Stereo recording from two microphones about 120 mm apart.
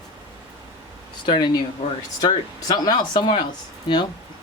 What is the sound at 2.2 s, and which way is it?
Speech, 35° left (ahead or behind).